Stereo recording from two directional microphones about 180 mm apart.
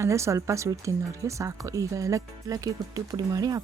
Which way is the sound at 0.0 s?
15° right (ahead or behind).